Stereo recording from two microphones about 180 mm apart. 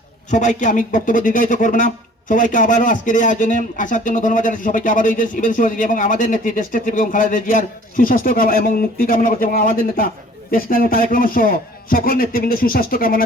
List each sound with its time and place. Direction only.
0.3 s speech: 40° left (ahead or behind)